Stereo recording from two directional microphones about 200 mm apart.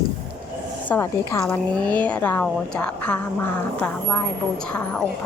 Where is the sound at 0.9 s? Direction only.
15° left (ahead or behind).